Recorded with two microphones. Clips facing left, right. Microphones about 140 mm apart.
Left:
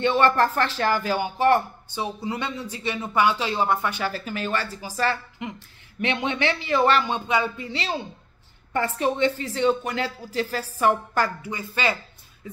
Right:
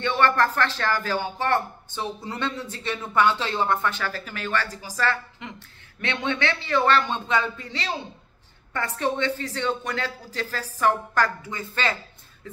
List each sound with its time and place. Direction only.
0.0 s a woman's voice: 15° left (ahead or behind)